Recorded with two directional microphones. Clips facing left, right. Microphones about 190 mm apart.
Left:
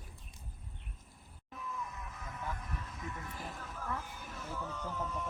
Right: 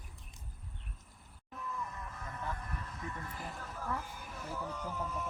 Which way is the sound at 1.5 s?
5° left (ahead or behind).